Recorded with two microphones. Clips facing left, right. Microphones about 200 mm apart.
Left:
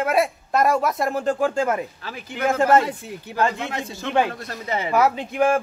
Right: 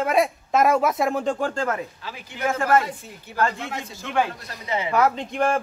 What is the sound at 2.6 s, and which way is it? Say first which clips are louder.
Speech: left 3 dB; 20° left (ahead or behind).